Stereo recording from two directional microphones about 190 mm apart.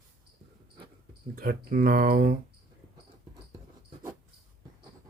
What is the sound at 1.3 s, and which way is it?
Speech, 50° right (ahead or behind).